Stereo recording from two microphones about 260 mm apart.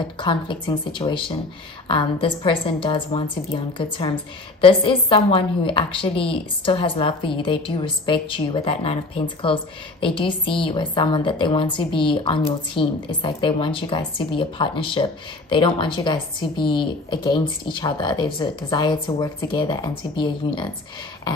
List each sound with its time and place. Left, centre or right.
0.2 s a woman's voice: centre